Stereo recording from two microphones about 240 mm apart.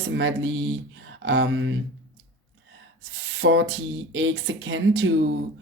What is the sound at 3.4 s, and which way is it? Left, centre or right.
Speech, right.